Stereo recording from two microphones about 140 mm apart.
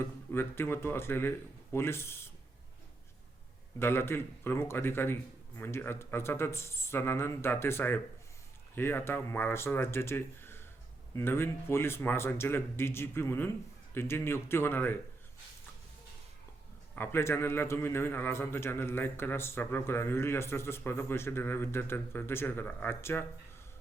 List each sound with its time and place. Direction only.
0.3 s a man's voice: 15° left (ahead or behind)
3.8 s a man's voice: 15° left (ahead or behind)
16.9 s a man's voice: 15° left (ahead or behind)